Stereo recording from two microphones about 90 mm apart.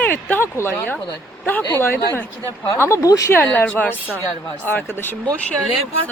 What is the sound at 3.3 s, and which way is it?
Speech, 20° left (ahead or behind).